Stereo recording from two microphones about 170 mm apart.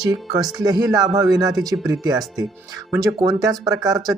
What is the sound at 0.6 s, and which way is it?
Speech, 25° right (ahead or behind).